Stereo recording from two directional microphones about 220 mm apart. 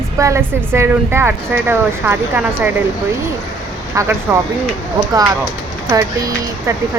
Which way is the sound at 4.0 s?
15° right (ahead or behind).